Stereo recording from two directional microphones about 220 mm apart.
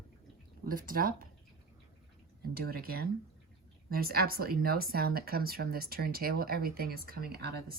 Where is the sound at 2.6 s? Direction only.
45° right (ahead or behind).